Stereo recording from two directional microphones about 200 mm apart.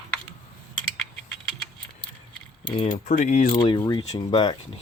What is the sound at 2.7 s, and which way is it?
Speech, 35° left (ahead or behind).